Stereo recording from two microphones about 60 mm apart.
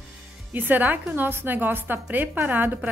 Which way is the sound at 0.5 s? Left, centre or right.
Right.